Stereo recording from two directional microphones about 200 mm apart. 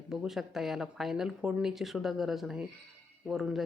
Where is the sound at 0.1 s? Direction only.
Centre (ahead or behind).